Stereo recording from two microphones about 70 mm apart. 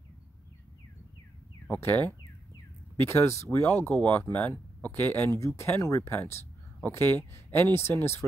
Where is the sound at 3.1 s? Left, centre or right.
Left.